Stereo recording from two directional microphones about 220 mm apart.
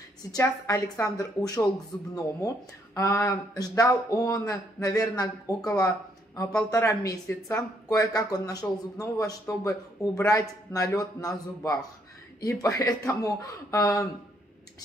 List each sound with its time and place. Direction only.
0.3 s speech: 15° left (ahead or behind)